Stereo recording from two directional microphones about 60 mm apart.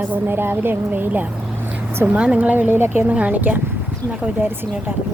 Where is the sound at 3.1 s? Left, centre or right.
Right.